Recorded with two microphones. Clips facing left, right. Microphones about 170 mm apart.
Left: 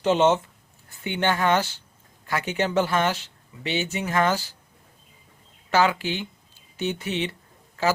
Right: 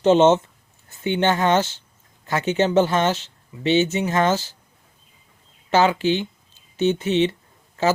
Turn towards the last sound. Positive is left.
turn(degrees=-20)  # may be behind; listen again after turning